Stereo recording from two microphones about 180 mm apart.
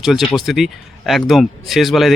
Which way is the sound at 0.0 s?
Centre (ahead or behind).